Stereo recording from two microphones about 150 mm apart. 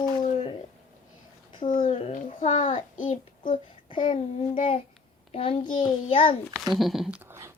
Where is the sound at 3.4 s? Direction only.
35° left (ahead or behind).